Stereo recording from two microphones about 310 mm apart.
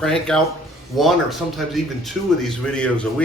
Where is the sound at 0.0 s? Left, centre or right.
Centre.